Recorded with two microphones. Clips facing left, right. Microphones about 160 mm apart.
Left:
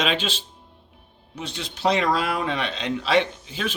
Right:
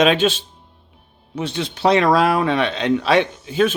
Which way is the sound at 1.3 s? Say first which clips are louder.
Right 9 dB; 65° right (ahead or behind).